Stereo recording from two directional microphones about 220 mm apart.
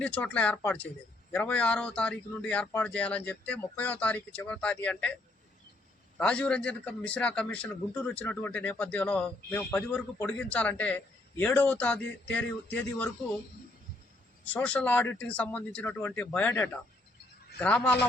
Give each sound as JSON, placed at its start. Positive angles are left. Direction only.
{"t": 0.0, "sound": "a man's voice", "side_deg": 5}
{"t": 6.1, "sound": "a man's voice", "side_deg": 5}
{"t": 14.4, "sound": "a man's voice", "side_deg": 5}